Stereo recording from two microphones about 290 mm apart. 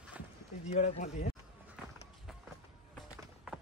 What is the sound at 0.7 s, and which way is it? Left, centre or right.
Speech, left.